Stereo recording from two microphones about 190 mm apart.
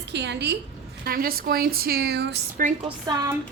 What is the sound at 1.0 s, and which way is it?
A woman's voice, 50° right (ahead or behind).